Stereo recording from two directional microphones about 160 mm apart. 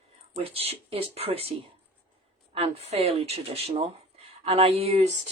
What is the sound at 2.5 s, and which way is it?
Speech, 40° right (ahead or behind).